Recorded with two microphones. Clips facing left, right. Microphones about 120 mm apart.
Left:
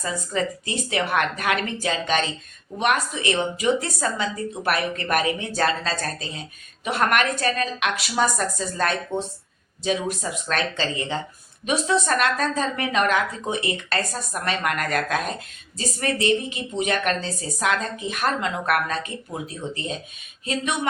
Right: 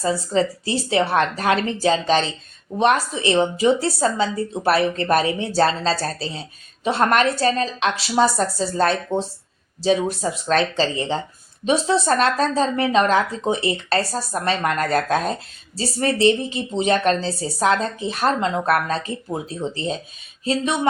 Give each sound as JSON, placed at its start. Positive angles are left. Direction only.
{"t": 0.0, "sound": "speech", "side_deg": -30}